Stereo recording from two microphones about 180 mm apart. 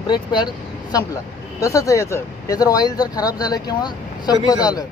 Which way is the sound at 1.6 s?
15° left (ahead or behind).